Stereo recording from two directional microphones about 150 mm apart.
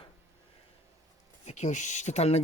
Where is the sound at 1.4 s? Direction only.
50° left (ahead or behind).